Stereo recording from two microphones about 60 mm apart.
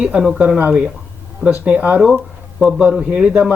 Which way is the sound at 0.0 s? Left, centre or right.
Centre.